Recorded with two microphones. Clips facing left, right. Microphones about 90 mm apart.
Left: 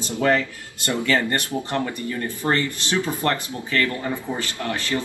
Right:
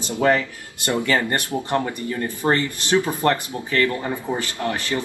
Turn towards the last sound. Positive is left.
turn(degrees=-20)  # may be behind; listen again after turning